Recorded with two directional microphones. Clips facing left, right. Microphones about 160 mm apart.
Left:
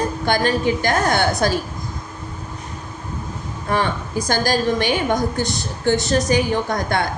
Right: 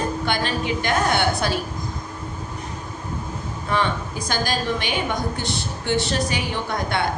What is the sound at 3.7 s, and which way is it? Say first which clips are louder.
A woman's voice: left 2 dB; 45° left (ahead or behind).